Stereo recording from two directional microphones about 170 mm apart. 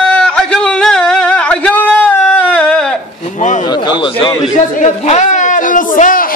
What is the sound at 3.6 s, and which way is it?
Speech, 25° left (ahead or behind).